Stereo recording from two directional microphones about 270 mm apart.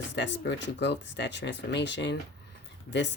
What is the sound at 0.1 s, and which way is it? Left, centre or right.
Speech, left.